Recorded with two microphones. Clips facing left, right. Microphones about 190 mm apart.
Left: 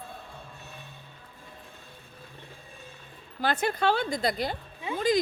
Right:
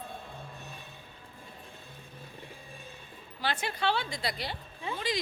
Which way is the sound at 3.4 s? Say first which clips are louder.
Left 6 dB; 45° left (ahead or behind).